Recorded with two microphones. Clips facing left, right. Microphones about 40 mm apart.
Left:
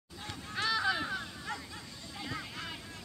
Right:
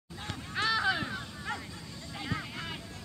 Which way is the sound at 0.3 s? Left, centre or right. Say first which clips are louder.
Right 3 dB; right.